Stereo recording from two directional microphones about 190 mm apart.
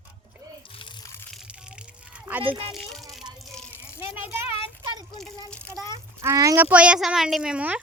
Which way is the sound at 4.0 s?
10° right (ahead or behind).